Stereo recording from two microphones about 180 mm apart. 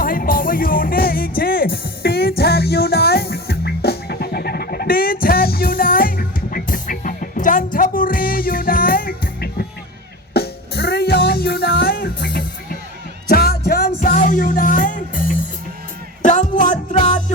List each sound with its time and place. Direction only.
0.0 s music: 50° left (ahead or behind)